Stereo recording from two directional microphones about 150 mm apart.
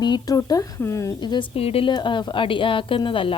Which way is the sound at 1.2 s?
30° left (ahead or behind).